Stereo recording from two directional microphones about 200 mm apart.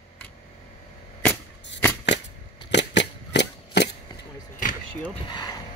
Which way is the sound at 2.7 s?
60° left (ahead or behind).